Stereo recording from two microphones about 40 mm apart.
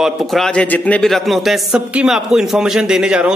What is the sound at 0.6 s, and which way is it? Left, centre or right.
Speech, left.